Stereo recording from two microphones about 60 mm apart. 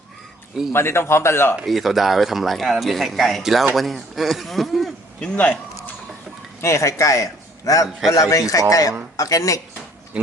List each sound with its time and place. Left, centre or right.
0.7 s a man's voice: left
1.6 s speech: centre
5.2 s speech: left
6.6 s a man's voice: left
8.7 s speech: left